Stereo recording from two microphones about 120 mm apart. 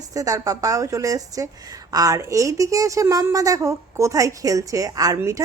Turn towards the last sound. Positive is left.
turn(degrees=-30)  # may be behind; listen again after turning